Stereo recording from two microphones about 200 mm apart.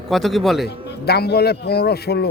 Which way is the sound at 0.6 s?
55° left (ahead or behind).